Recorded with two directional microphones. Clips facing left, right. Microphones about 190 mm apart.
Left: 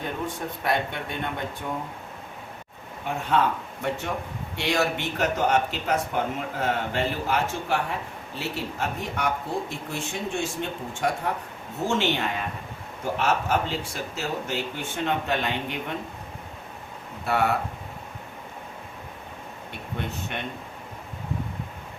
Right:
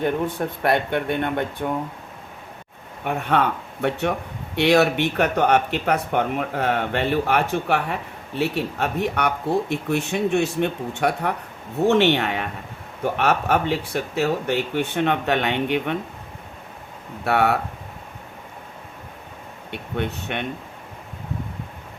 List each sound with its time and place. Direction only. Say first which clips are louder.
0.6 s speech: right 6 dB; 60° right (ahead or behind)
3.0 s speech: right 3 dB; 60° right (ahead or behind)
17.2 s speech: right 4 dB; 65° right (ahead or behind)
19.7 s speech: right 6 dB; 65° right (ahead or behind)